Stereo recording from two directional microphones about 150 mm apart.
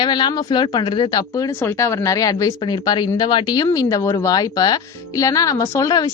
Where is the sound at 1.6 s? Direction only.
20° left (ahead or behind).